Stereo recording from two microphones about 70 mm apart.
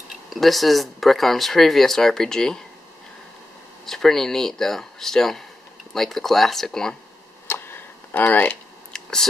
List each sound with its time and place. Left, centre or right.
0.3 s speech: centre
3.8 s speech: centre
7.4 s a sound: left
8.9 s clicking: centre